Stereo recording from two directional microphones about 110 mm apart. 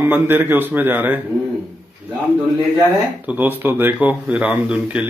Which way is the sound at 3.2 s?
15° right (ahead or behind).